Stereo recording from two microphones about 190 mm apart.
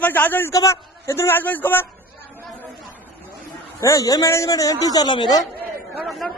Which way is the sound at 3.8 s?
15° left (ahead or behind).